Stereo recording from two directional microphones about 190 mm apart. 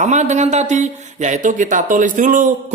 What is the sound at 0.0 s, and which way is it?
Speech, 40° right (ahead or behind).